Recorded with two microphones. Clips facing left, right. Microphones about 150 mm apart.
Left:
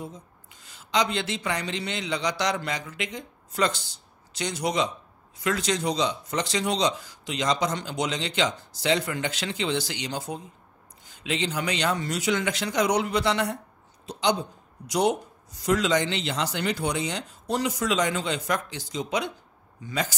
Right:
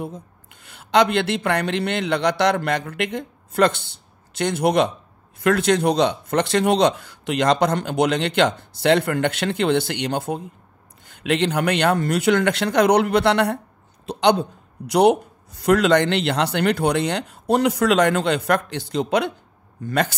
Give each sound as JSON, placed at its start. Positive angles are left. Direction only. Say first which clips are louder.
{"t": 0.0, "sound": "a man's voice", "louder": "right 7 dB", "side_deg": -60}